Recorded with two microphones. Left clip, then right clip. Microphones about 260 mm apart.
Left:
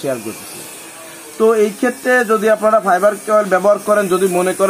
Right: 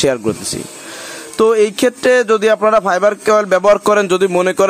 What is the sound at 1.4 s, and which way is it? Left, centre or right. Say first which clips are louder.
Speech: right 1 dB; right.